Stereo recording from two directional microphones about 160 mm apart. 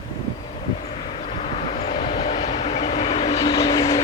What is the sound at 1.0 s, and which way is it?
Vehicle, 35° left (ahead or behind).